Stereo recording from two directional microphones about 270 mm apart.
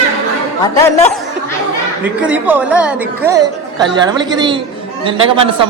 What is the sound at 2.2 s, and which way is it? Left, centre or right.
A man's voice, centre.